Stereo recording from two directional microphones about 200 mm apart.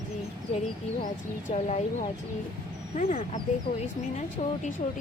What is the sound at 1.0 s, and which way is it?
Speech, 35° left (ahead or behind).